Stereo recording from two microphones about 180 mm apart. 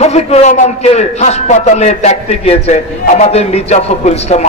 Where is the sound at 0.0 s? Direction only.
35° left (ahead or behind).